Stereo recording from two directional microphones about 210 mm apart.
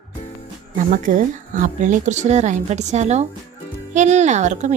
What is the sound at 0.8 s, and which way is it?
Speech, 40° right (ahead or behind).